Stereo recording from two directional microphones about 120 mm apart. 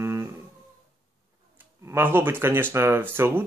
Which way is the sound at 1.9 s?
20° right (ahead or behind).